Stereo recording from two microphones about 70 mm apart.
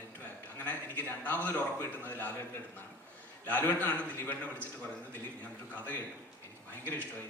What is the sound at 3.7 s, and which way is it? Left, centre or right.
A man's voice, left.